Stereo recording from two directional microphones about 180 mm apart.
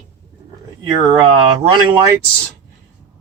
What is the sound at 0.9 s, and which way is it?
Speech, 25° right (ahead or behind).